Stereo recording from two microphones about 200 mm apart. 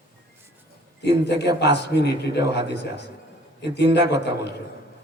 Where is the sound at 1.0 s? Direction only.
60° left (ahead or behind).